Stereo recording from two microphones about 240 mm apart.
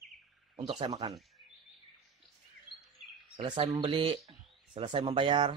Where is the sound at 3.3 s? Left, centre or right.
Centre.